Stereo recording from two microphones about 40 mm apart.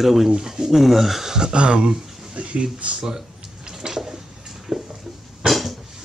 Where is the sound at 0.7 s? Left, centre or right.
Centre.